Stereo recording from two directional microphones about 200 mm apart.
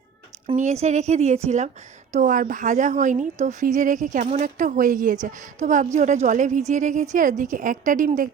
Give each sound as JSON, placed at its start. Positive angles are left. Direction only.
{"t": 0.5, "sound": "a woman's voice", "side_deg": -35}